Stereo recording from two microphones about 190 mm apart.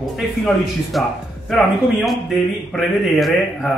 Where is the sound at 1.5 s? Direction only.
Centre (ahead or behind).